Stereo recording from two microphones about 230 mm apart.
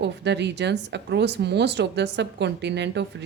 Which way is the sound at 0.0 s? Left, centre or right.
Right.